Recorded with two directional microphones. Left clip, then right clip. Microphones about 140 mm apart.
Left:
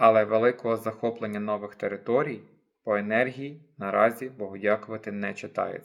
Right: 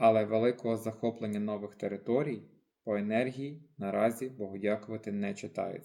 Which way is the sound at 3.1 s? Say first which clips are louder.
Left 6 dB; 35° right (ahead or behind).